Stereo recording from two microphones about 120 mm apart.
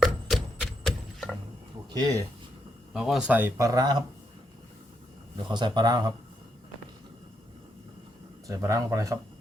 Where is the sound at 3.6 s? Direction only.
30° right (ahead or behind).